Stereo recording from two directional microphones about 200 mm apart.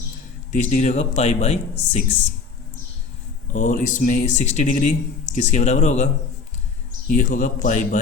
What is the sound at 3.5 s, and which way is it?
Speech, 40° left (ahead or behind).